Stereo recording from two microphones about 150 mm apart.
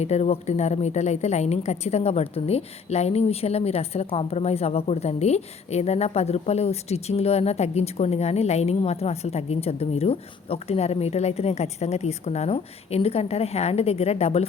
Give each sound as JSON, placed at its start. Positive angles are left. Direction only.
{"t": 0.0, "sound": "a woman's voice", "side_deg": 45}